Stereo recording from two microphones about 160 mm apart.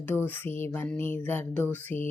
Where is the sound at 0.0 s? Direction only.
10° left (ahead or behind).